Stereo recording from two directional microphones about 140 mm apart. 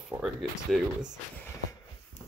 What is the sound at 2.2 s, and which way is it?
Dog, 55° left (ahead or behind).